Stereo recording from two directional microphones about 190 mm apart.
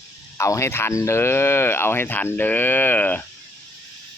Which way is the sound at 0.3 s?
15° left (ahead or behind).